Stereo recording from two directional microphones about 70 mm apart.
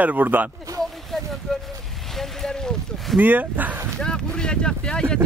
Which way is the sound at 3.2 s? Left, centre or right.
Right.